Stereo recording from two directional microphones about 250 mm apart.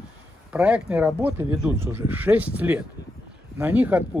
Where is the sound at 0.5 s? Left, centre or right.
Centre.